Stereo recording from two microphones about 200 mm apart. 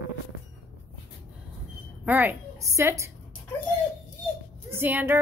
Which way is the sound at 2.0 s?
10° right (ahead or behind).